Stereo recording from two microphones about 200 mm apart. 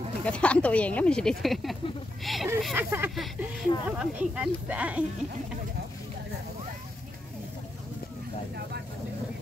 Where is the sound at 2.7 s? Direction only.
10° right (ahead or behind).